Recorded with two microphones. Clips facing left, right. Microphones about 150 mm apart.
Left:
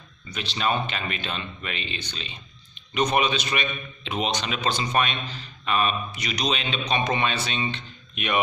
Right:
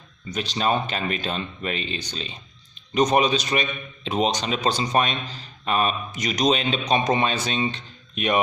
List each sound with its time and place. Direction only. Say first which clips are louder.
0.3 s a man's voice: right 3 dB; 40° right (ahead or behind)